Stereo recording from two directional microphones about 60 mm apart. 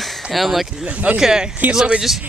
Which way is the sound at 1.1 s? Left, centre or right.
Centre.